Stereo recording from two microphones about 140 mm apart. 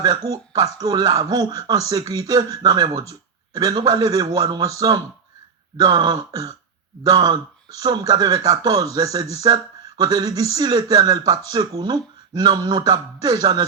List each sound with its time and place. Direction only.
0.0 s speech: 25° right (ahead or behind)